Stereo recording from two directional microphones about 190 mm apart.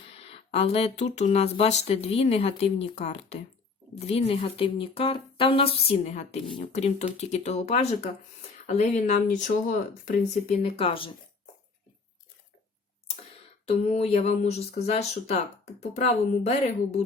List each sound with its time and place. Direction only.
0.0 s speech: 30° left (ahead or behind)
13.7 s speech: 35° left (ahead or behind)